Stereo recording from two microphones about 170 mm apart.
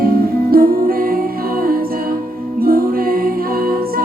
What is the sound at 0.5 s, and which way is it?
Music, 60° right (ahead or behind).